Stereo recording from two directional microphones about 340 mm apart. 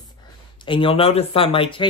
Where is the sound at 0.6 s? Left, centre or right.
Centre.